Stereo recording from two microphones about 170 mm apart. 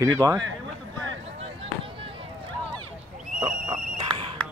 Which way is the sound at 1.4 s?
35° right (ahead or behind).